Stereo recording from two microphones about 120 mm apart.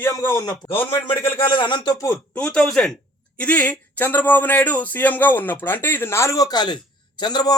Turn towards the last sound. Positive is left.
turn(degrees=35)  # may be behind; listen again after turning